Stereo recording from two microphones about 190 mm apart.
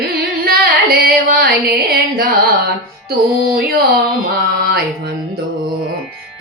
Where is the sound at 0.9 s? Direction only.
50° right (ahead or behind).